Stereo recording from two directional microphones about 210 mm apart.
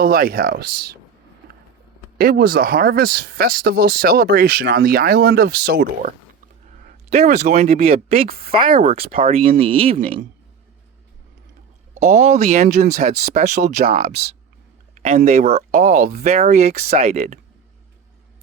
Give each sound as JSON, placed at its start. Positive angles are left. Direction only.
{"t": 0.0, "sound": "speech", "side_deg": -45}
{"t": 2.1, "sound": "speech", "side_deg": -45}
{"t": 6.8, "sound": "speech", "side_deg": -30}
{"t": 8.4, "sound": "speech", "side_deg": -25}
{"t": 11.9, "sound": "speech", "side_deg": -35}